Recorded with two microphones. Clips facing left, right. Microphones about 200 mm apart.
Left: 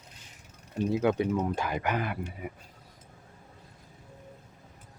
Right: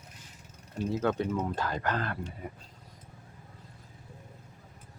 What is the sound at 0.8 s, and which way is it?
Speech, 15° left (ahead or behind).